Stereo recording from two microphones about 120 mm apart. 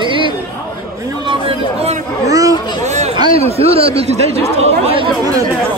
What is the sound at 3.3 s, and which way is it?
Speech, 55° right (ahead or behind).